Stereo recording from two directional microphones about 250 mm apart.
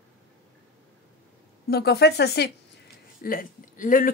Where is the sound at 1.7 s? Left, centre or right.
Left.